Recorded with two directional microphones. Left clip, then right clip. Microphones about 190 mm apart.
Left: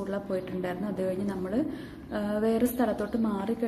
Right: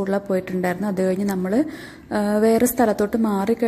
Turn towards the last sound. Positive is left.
turn(degrees=-40)  # may be behind; listen again after turning